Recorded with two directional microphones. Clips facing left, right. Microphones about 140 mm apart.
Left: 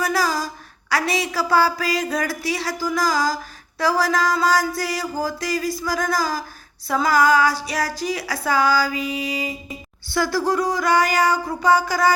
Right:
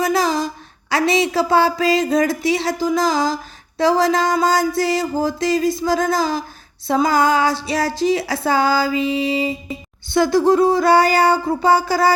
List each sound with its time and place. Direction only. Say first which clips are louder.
0.0 s a woman's voice: right 4 dB; 25° right (ahead or behind)
3.8 s female singing: right 4 dB; 25° right (ahead or behind)